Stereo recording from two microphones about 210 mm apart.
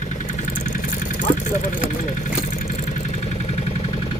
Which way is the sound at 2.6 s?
35° left (ahead or behind).